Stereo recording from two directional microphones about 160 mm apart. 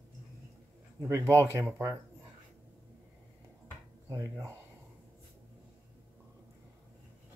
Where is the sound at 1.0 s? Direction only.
15° right (ahead or behind).